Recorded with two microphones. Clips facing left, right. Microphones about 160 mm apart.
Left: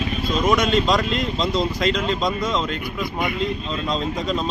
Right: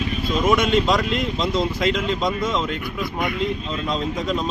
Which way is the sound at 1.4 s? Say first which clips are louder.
Even; 25° left (ahead or behind).